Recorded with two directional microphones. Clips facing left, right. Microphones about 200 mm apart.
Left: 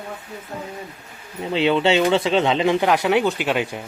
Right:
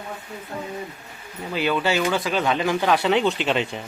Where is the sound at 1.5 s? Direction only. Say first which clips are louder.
Left 5 dB; 25° left (ahead or behind); by 3.8 s 5° left (ahead or behind).